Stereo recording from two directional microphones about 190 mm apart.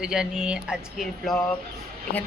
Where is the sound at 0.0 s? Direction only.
5° right (ahead or behind).